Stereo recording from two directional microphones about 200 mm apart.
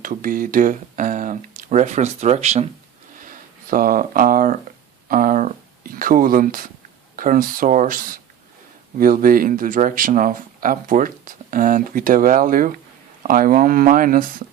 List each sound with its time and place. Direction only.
0.0 s speech: 45° right (ahead or behind)
3.2 s a sound: 45° right (ahead or behind)
7.2 s speech: 45° right (ahead or behind)